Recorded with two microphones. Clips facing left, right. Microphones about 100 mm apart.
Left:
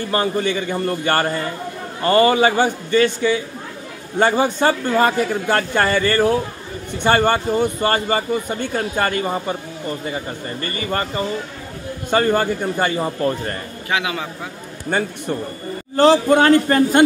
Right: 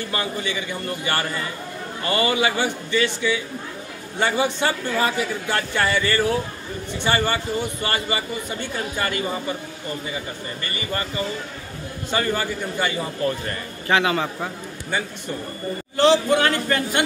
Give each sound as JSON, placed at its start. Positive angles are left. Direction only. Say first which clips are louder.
{"t": 0.1, "sound": "speech", "louder": "left 9 dB", "side_deg": 40}
{"t": 13.8, "sound": "a man's voice", "louder": "right 3 dB", "side_deg": 10}
{"t": 14.9, "sound": "a man's voice", "louder": "left 6 dB", "side_deg": 50}